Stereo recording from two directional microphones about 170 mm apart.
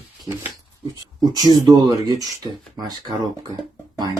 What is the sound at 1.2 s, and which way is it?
Speech, 25° right (ahead or behind).